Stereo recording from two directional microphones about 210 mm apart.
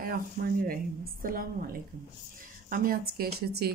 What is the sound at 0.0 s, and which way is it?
Speech, 45° right (ahead or behind).